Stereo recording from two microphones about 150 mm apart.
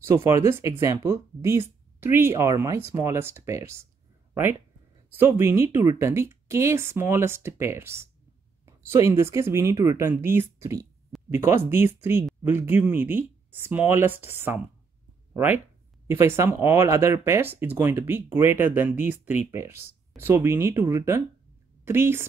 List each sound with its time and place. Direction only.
0.0 s speech: 20° right (ahead or behind)
4.3 s a sound: 15° right (ahead or behind)
5.1 s speech: 15° right (ahead or behind)